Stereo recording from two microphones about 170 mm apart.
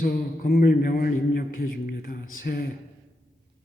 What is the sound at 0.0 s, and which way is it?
A man's voice, 60° left (ahead or behind).